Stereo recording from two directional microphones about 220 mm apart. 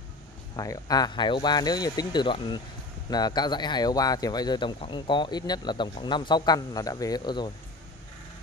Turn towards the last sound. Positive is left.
turn(degrees=20)  # may be behind; listen again after turning